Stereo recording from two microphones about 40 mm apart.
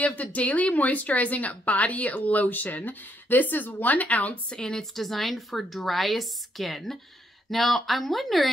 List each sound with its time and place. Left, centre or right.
0.0 s speech: left
4.5 s a woman's voice: centre
4.9 s a woman's voice: centre